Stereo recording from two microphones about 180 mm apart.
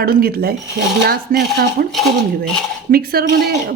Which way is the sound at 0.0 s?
60° right (ahead or behind).